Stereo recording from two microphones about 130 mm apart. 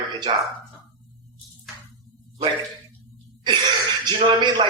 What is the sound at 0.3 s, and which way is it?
Speech, 40° right (ahead or behind).